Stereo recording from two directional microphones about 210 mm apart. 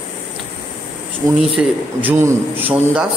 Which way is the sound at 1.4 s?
Centre (ahead or behind).